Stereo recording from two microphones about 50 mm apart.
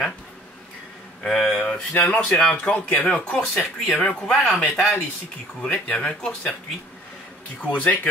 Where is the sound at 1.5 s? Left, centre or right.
Left.